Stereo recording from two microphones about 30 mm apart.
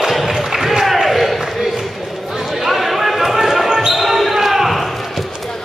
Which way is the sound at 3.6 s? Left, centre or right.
Centre.